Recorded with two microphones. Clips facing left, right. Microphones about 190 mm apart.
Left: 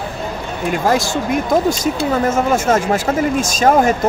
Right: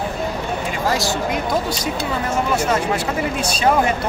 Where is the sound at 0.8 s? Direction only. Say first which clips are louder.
Left 4 dB; 50° left (ahead or behind).